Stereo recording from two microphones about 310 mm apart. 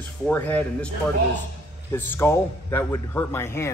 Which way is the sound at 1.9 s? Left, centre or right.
Centre.